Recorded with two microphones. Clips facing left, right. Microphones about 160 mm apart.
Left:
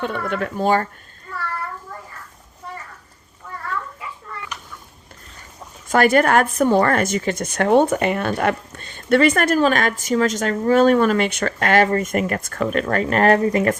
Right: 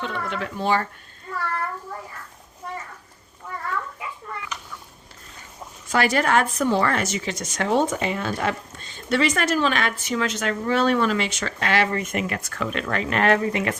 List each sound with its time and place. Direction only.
0.0 s speech: 50° left (ahead or behind)
5.9 s speech: 50° left (ahead or behind)